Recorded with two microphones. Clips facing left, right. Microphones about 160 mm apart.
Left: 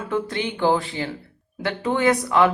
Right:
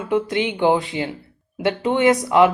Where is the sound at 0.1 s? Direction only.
20° right (ahead or behind).